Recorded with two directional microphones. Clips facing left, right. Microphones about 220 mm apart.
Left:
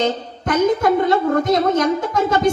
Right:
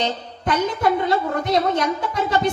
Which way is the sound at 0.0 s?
45° left (ahead or behind).